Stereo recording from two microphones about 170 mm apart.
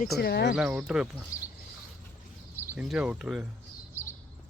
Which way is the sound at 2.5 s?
10° right (ahead or behind).